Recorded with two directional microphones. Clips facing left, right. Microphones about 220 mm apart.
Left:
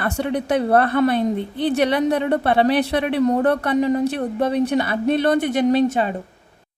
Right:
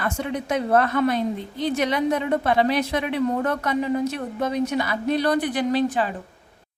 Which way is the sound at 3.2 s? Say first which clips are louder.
Left 5 dB; 35° left (ahead or behind).